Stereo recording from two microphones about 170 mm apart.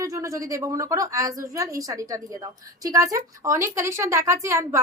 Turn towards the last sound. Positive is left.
turn(degrees=-15)  # may be behind; listen again after turning